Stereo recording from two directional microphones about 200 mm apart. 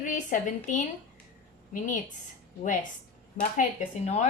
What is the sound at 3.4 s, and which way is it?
Speech, 35° left (ahead or behind).